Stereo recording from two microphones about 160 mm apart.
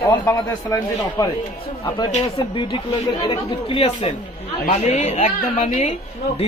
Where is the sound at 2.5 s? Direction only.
30° left (ahead or behind).